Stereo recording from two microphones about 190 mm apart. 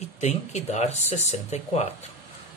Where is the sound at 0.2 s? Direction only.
35° left (ahead or behind).